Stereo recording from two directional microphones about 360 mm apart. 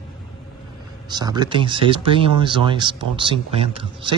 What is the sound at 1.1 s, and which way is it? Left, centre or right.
Speech, centre.